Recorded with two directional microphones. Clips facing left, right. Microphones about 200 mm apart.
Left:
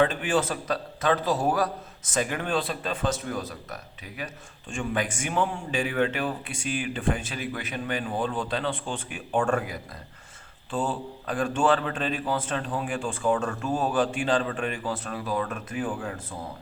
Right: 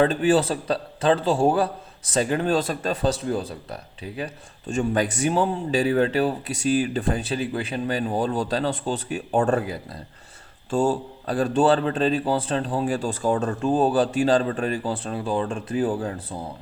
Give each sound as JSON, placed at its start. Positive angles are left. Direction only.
{"t": 0.0, "sound": "a man's voice", "side_deg": -35}
{"t": 10.7, "sound": "a man's voice", "side_deg": -45}